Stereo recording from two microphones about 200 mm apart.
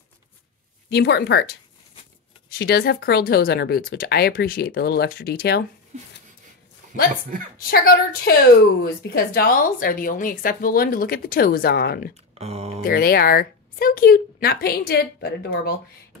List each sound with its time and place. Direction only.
0.8 s speech: 55° left (ahead or behind)
2.6 s speech: 55° left (ahead or behind)
7.7 s speech: 50° left (ahead or behind)
12.4 s speech: 30° right (ahead or behind)
12.8 s speech: 50° left (ahead or behind)